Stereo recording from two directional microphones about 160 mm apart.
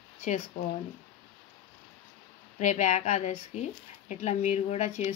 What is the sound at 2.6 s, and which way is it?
Speech, 50° left (ahead or behind).